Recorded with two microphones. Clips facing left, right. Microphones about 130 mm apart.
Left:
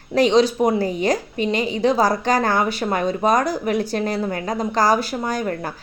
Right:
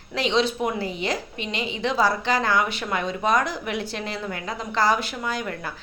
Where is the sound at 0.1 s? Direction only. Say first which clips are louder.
Left 7 dB; 45° left (ahead or behind).